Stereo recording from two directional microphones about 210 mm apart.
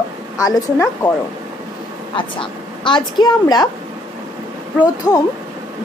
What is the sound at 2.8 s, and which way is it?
Speech, 20° left (ahead or behind).